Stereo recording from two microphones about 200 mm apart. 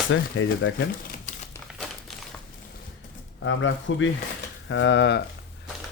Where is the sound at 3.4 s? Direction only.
70° left (ahead or behind).